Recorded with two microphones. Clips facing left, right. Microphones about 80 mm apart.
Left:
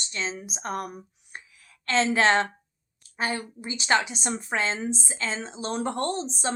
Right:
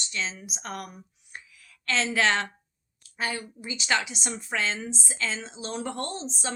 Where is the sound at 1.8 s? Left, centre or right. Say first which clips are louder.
Left 3 dB; left.